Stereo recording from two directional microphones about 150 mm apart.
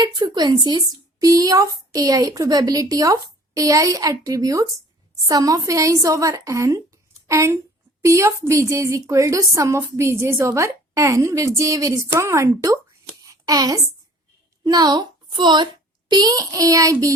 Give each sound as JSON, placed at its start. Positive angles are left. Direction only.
{"t": 0.0, "sound": "a woman's voice", "side_deg": -25}